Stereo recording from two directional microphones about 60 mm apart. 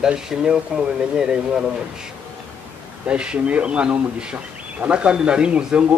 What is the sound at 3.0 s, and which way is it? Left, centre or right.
Speech, centre.